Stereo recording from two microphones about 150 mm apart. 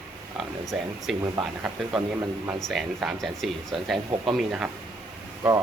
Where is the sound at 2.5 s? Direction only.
Centre (ahead or behind).